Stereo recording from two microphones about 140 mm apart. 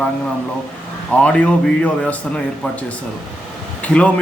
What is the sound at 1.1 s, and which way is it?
A man's voice, 10° left (ahead or behind).